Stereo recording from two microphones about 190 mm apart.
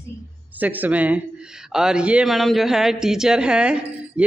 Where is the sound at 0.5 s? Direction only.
10° right (ahead or behind).